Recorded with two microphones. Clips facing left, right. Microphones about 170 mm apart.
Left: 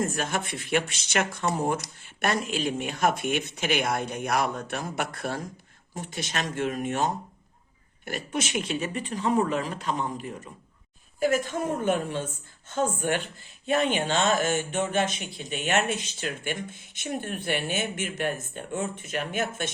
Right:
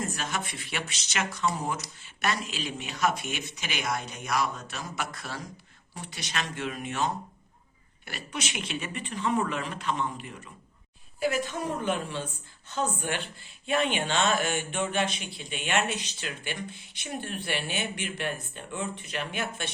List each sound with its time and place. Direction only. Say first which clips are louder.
0.0 s a woman's voice: left 5 dB; 50° left (ahead or behind)